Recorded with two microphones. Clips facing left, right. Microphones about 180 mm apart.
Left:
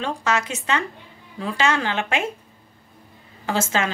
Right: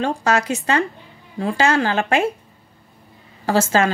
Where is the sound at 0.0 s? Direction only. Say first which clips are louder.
Right 4 dB; 40° right (ahead or behind).